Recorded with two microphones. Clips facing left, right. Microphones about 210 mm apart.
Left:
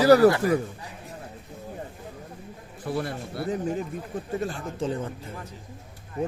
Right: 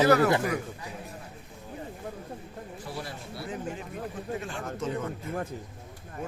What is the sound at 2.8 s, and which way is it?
Speech, 55° left (ahead or behind).